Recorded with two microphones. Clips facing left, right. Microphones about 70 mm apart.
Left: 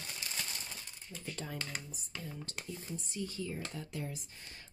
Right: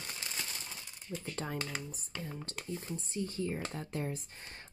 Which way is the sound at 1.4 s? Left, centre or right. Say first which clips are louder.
Right 4 dB; right.